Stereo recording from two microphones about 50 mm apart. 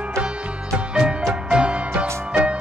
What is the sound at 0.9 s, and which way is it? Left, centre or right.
Music, centre.